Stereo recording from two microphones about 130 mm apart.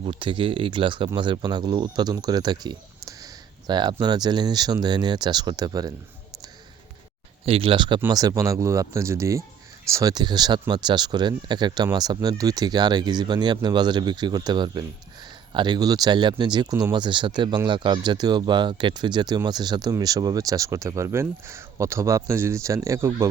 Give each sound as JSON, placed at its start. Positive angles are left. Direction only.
{"t": 0.0, "sound": "speech", "side_deg": -40}
{"t": 7.4, "sound": "speech", "side_deg": -45}
{"t": 8.0, "sound": "speech", "side_deg": -30}